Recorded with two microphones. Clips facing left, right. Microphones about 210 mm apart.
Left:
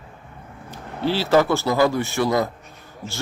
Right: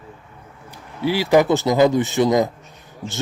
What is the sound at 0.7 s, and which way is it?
A man's voice, 10° right (ahead or behind).